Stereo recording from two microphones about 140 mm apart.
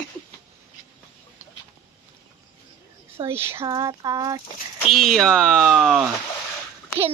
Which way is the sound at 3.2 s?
20° right (ahead or behind).